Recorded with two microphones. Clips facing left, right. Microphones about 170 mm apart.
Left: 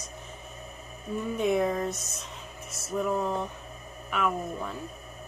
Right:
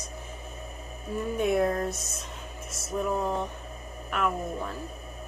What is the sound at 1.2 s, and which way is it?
A woman's voice, centre (ahead or behind).